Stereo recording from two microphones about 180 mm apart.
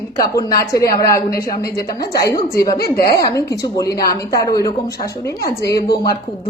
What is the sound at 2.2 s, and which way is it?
A woman's voice, 20° left (ahead or behind).